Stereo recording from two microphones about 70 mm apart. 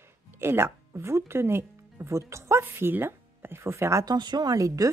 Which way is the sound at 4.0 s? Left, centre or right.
Right.